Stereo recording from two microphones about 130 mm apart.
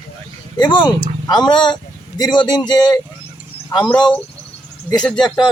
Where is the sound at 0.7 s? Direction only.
35° left (ahead or behind).